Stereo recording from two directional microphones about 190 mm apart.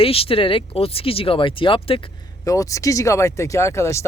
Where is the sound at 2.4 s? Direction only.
15° left (ahead or behind).